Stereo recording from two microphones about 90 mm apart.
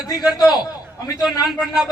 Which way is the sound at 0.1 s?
45° left (ahead or behind).